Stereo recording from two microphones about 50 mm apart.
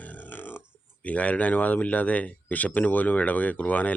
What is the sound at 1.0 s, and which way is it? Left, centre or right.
Speech, left.